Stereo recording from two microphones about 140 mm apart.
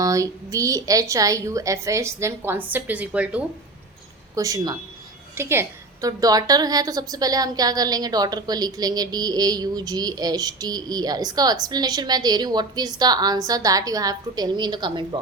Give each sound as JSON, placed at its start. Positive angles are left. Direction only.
{"t": 0.0, "sound": "a woman's voice", "side_deg": -25}
{"t": 4.4, "sound": "a woman's voice", "side_deg": -25}